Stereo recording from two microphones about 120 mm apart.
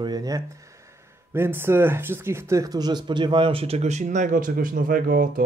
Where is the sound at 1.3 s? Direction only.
20° right (ahead or behind); by 4.5 s 90° right.